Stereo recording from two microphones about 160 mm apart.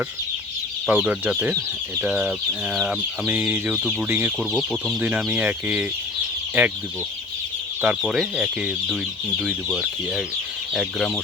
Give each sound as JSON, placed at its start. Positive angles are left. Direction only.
{"t": 0.9, "sound": "speech", "side_deg": -10}
{"t": 7.8, "sound": "speech", "side_deg": -5}